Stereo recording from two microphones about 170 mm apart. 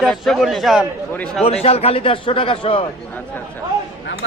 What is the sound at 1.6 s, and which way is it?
A man's voice, 35° left (ahead or behind).